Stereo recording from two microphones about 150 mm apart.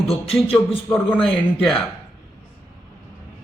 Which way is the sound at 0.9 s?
5° left (ahead or behind).